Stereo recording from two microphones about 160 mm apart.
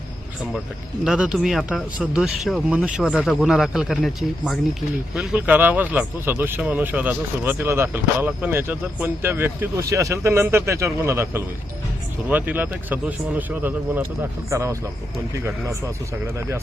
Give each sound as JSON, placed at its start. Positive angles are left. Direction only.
{"t": 1.0, "sound": "speech", "side_deg": -5}